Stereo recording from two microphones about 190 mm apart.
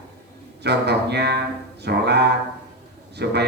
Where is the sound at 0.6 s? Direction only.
60° right (ahead or behind).